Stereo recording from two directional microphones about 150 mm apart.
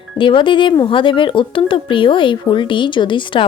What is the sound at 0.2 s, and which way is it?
Speech, 35° left (ahead or behind).